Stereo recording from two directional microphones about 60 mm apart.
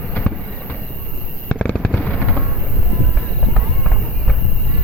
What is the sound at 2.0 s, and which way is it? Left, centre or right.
Fireworks, centre.